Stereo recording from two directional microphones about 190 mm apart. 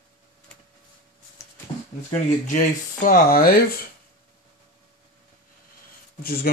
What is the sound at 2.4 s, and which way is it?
Speech, 45° left (ahead or behind).